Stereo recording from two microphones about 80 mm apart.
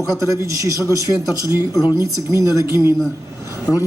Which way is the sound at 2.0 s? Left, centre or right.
Right.